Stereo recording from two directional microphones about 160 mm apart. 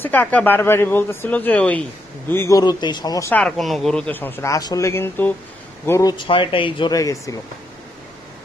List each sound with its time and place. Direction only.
0.0 s speech: 10° left (ahead or behind)
3.3 s speech: 5° left (ahead or behind); by 6.1 s 20° left (ahead or behind)
6.1 s speech: 30° left (ahead or behind)